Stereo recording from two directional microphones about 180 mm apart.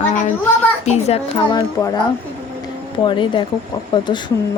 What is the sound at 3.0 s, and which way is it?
Speech, 25° left (ahead or behind).